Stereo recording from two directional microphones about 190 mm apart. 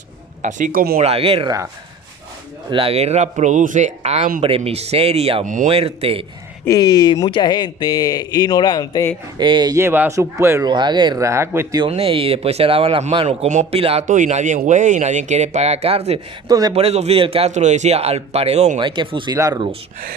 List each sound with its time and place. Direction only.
0.4 s speech: 45° right (ahead or behind)
0.9 s speech: 30° right (ahead or behind)
2.6 s speech: 30° right (ahead or behind)
6.7 s speech: 20° left (ahead or behind)
9.4 s speech: 25° right (ahead or behind)
11.8 s speech: 30° right (ahead or behind)
16.5 s speech: 20° right (ahead or behind)
16.7 s speech: 35° right (ahead or behind)